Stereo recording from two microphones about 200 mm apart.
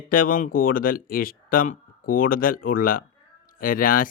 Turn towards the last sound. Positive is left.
turn(degrees=45)  # may be behind; listen again after turning